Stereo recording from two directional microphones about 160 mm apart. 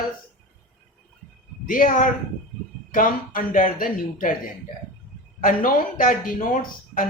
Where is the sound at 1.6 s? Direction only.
60° left (ahead or behind).